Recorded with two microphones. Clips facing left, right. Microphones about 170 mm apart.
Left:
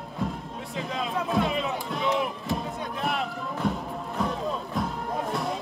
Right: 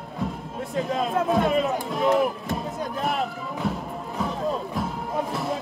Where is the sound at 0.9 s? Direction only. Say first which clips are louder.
Right 4 dB; 50° right (ahead or behind).